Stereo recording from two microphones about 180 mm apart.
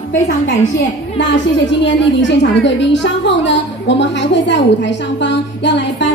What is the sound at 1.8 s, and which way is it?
Speech, 85° left.